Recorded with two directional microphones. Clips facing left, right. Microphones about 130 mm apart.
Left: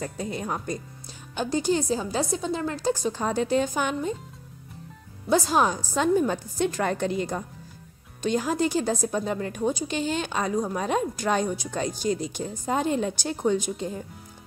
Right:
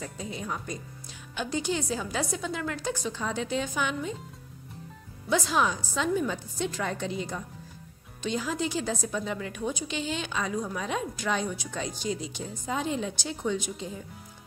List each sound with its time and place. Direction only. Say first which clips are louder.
0.0 s a woman's voice: left 5 dB; 55° left (ahead or behind)
5.3 s a woman's voice: left 4 dB; 40° left (ahead or behind)